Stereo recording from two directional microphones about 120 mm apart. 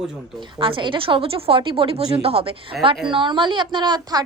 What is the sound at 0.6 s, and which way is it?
A woman's voice, 45° right (ahead or behind).